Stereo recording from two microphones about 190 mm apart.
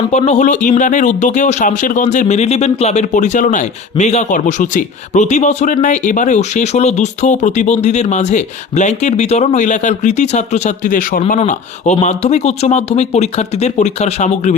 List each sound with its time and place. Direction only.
0.1 s speech: 35° left (ahead or behind)